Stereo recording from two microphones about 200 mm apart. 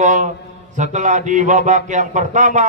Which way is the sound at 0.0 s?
35° right (ahead or behind).